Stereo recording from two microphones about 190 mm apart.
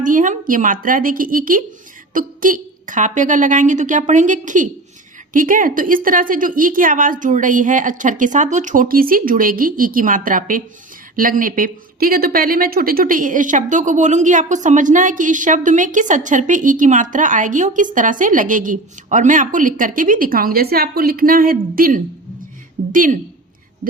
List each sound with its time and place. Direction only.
0.0 s a woman's voice: 45° right (ahead or behind)